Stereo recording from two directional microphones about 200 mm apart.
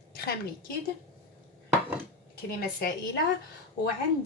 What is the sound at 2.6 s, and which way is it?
Speech, 50° left (ahead or behind).